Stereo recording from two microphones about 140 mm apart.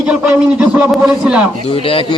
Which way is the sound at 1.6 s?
40° left (ahead or behind).